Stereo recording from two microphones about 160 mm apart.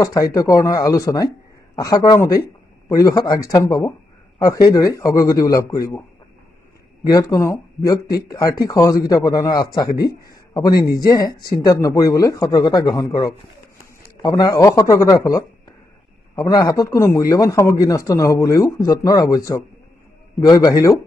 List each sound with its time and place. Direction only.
0.0 s speech: 20° left (ahead or behind)
7.1 s speech: 20° left (ahead or behind)
11.0 s speech: 25° left (ahead or behind)